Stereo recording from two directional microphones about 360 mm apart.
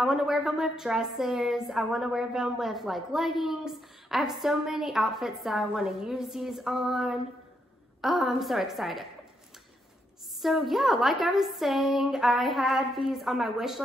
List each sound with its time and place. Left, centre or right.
0.0 s a woman's voice: centre
10.4 s a woman's voice: centre